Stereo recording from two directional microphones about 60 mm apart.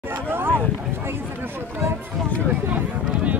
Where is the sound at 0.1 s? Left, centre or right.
Right.